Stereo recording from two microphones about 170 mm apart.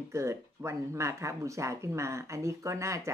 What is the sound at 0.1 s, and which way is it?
Speech, 15° right (ahead or behind).